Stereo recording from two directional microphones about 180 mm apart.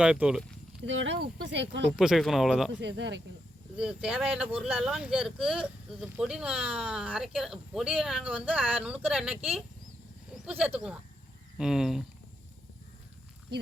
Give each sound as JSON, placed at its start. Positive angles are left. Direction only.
{"t": 0.0, "sound": "speech", "side_deg": -5}
{"t": 0.9, "sound": "speech", "side_deg": -90}
{"t": 1.9, "sound": "speech", "side_deg": 0}
{"t": 2.7, "sound": "speech", "side_deg": -80}
{"t": 3.8, "sound": "speech", "side_deg": -5}
{"t": 10.3, "sound": "a sound", "side_deg": -5}
{"t": 10.8, "sound": "speech", "side_deg": -5}